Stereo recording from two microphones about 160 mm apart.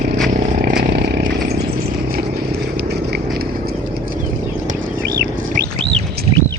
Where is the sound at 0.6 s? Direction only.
75° right (ahead or behind).